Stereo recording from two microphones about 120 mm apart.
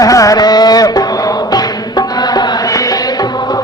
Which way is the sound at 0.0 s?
30° left (ahead or behind).